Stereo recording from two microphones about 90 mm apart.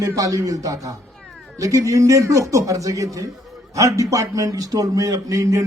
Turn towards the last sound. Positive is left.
turn(degrees=-35)  # may be behind; listen again after turning